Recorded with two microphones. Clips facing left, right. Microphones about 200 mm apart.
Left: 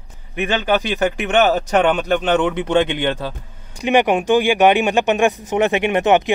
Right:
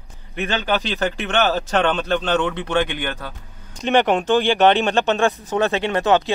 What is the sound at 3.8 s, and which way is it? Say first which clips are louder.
Speech: left 2 dB; 10° left (ahead or behind).